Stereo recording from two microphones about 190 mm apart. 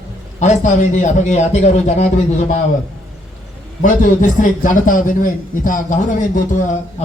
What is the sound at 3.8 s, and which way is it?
A man's voice, 45° left (ahead or behind).